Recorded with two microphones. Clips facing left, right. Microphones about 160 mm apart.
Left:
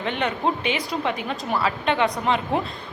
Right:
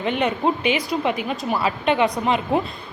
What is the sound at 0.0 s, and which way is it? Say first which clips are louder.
A woman's voice: right 3 dB; 10° right (ahead or behind).